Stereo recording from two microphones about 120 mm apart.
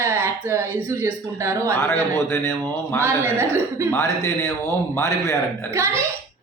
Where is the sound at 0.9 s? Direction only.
20° right (ahead or behind).